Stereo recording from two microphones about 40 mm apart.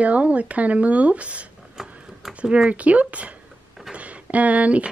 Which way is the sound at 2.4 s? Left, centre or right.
Right.